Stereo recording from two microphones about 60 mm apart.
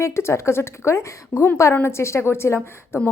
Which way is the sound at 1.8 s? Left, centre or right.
Left.